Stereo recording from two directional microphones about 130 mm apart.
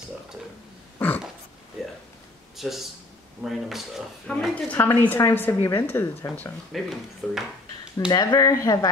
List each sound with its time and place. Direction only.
0.9 s a sound: 15° left (ahead or behind)
2.5 s speech: centre (ahead or behind)
4.7 s a woman's voice: 15° left (ahead or behind)
6.7 s speech: centre (ahead or behind)
8.1 s speech: 30° left (ahead or behind)